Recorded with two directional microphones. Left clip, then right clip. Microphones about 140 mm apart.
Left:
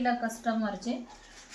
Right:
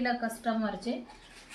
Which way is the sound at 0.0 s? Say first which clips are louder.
Left 2 dB; 15° right (ahead or behind).